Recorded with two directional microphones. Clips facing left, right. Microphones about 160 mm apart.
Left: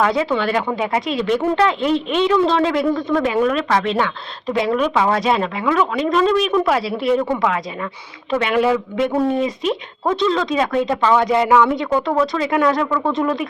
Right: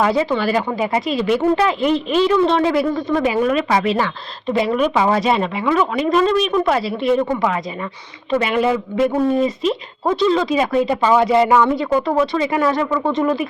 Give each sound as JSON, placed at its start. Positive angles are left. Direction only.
{"t": 0.0, "sound": "speech", "side_deg": 0}